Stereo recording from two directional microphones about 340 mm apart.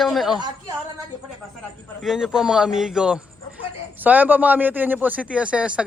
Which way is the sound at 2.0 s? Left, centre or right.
Centre.